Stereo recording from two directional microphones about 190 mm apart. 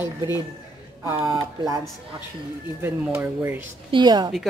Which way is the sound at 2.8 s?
10° right (ahead or behind).